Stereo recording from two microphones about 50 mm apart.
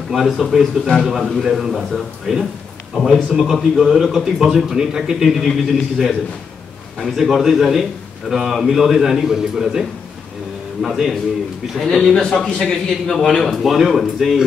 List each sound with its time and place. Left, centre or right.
0.1 s speech: centre
11.8 s a man's voice: centre